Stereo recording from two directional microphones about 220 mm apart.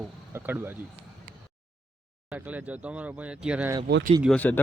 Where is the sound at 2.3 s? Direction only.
5° right (ahead or behind).